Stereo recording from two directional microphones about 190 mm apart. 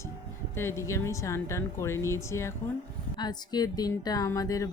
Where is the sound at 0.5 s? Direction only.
15° left (ahead or behind).